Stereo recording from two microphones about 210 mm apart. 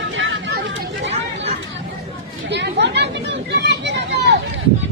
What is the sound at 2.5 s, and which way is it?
Chatter, 55° right (ahead or behind).